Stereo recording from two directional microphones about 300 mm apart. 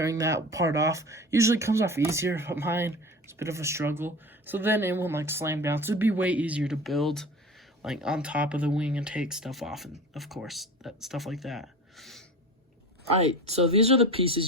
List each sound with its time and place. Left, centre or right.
0.0 s speech: centre
13.1 s speech: right